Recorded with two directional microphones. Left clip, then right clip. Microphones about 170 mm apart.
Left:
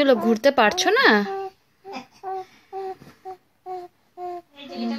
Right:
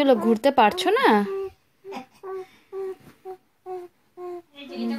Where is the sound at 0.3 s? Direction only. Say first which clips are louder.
Left 1 dB; 10° right (ahead or behind).